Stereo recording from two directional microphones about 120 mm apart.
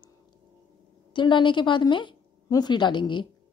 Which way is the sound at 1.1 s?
40° left (ahead or behind).